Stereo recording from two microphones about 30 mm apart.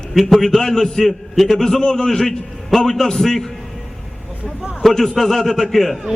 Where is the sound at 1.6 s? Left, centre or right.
Left.